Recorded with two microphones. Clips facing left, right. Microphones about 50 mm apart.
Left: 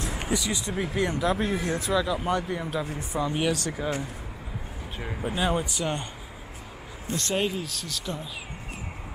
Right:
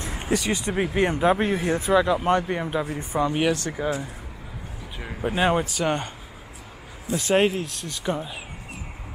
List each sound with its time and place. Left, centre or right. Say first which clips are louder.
0.3 s speech: right 6 dB; right
2.6 s speech: right 4 dB; right
3.2 s speech: right 4 dB; centre
5.2 s speech: right 5 dB; right
7.3 s speech: right 8 dB; right
7.8 s speech: right 6 dB; centre